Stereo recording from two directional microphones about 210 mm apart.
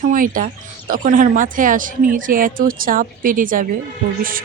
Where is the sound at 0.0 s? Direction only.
40° right (ahead or behind).